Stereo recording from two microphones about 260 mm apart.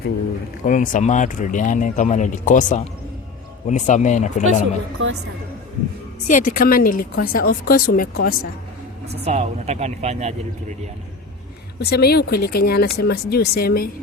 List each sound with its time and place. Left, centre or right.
0.6 s speech: left
6.2 s a woman's voice: left
9.1 s speech: right
11.8 s a woman's voice: left